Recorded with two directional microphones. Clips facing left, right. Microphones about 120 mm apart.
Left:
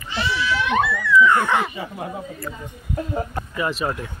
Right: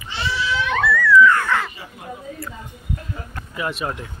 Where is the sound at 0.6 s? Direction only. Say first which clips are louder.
Right 4 dB; 20° left (ahead or behind).